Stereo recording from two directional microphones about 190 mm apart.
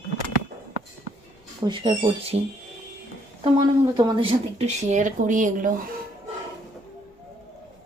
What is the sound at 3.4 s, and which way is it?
Speech, 25° right (ahead or behind).